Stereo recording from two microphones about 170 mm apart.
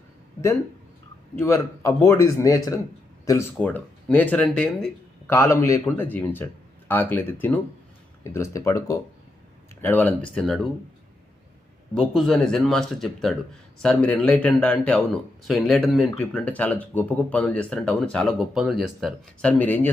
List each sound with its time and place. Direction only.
1.4 s speech: 15° left (ahead or behind)
5.3 s speech: 15° left (ahead or behind)
11.9 s speech: centre (ahead or behind)